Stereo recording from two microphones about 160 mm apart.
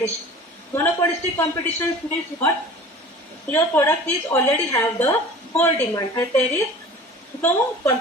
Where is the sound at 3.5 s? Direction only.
15° left (ahead or behind).